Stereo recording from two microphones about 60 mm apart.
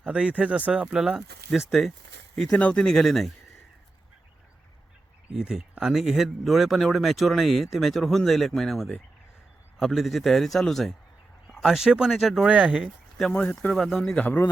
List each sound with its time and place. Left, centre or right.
0.0 s speech: centre
1.5 s speech: centre
2.6 s speech: centre
5.3 s speech: centre
12.5 s speech: right
13.3 s speech: left
13.7 s speech: centre
14.2 s speech: left